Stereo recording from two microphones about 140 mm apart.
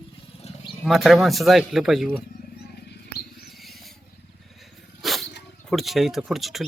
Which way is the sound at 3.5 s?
Centre (ahead or behind).